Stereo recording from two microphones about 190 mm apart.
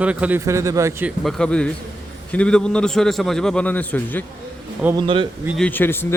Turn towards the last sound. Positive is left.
turn(degrees=10)  # may be behind; listen again after turning